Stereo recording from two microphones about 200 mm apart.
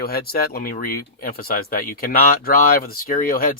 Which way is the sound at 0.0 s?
50° left (ahead or behind).